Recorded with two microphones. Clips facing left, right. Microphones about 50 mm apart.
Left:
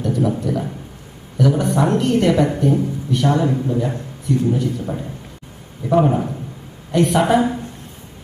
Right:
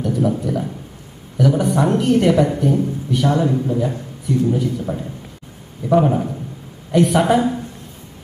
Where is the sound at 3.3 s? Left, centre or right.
Centre.